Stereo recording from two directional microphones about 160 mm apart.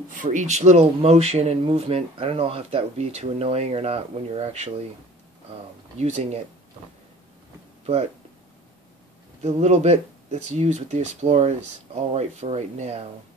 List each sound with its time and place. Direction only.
0.1 s speech: 55° right (ahead or behind)
5.9 s speech: 45° right (ahead or behind)
7.8 s speech: 40° right (ahead or behind)
9.4 s speech: 45° right (ahead or behind)